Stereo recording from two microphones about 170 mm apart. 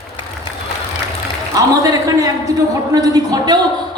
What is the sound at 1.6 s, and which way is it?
A man's voice, 20° right (ahead or behind).